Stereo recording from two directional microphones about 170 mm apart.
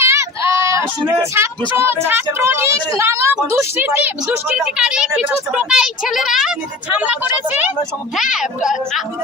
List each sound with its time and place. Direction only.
0.0 s speech: 15° right (ahead or behind)
8.1 s a woman's voice: centre (ahead or behind)